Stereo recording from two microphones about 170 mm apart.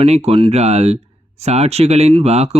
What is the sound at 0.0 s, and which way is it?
Speech, 35° right (ahead or behind).